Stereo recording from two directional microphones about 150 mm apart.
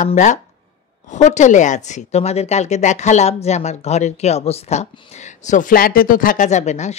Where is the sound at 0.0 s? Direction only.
55° left (ahead or behind).